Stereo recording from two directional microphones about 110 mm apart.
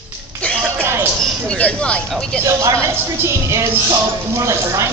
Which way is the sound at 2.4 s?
25° right (ahead or behind).